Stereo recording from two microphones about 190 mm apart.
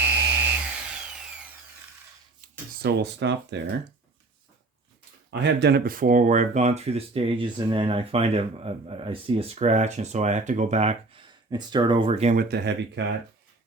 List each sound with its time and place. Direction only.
0.0 s a sound: 10° right (ahead or behind)
2.8 s speech: 65° right (ahead or behind)
5.3 s speech: 65° right (ahead or behind); by 11.2 s 35° right (ahead or behind)
11.5 s speech: 20° right (ahead or behind); by 12.5 s 40° right (ahead or behind)
12.5 s speech: 60° right (ahead or behind)